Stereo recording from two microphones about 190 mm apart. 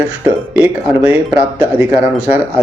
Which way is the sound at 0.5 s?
10° right (ahead or behind).